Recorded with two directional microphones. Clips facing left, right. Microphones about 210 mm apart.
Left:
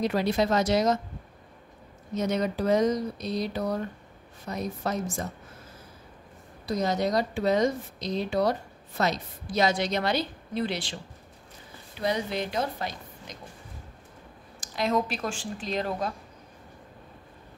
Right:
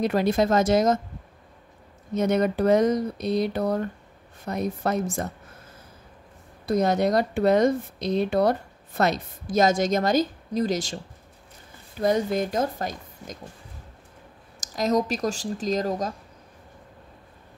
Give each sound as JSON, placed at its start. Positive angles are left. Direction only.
{"t": 0.0, "sound": "a woman's voice", "side_deg": -50}
{"t": 2.1, "sound": "speech", "side_deg": -55}
{"t": 6.6, "sound": "speech", "side_deg": -55}
{"t": 12.0, "sound": "a woman's voice", "side_deg": -45}
{"t": 14.6, "sound": "speech", "side_deg": -40}